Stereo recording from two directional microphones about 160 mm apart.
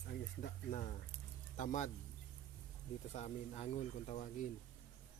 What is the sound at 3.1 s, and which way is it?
Speech, 45° left (ahead or behind).